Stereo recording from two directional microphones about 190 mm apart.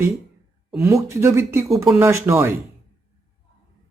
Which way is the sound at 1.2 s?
15° right (ahead or behind).